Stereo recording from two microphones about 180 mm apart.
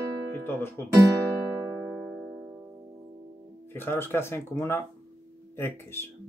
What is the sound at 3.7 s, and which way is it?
Speech, 10° left (ahead or behind).